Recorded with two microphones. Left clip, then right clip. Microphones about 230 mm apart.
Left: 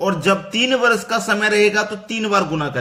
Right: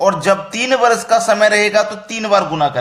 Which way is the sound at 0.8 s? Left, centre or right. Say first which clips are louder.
Right 5 dB; centre.